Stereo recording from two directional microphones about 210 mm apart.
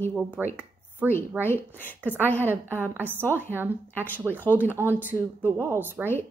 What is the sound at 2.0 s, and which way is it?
A woman's voice, 10° left (ahead or behind).